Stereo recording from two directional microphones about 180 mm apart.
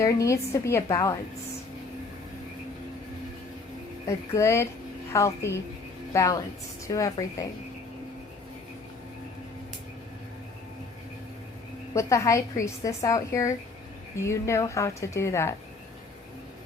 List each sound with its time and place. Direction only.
0.0 s a woman's voice: 15° left (ahead or behind)
4.0 s a woman's voice: 15° left (ahead or behind)
11.9 s a woman's voice: 15° left (ahead or behind)